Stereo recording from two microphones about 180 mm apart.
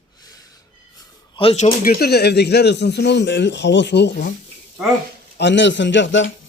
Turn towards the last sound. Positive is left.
turn(degrees=90)